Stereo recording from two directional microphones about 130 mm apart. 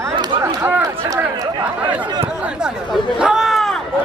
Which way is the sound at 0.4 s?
20° right (ahead or behind).